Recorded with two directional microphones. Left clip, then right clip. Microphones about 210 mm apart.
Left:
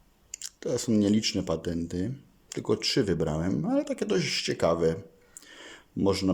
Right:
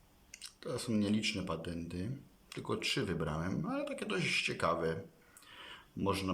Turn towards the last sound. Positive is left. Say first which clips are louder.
# left 9 dB
turn(degrees=25)  # may be behind; listen again after turning